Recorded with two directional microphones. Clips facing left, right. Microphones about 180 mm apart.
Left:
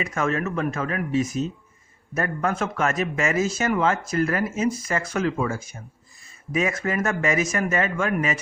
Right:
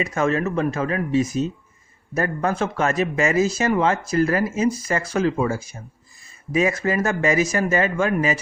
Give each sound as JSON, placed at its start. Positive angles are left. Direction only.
{"t": 0.0, "sound": "speech", "side_deg": -30}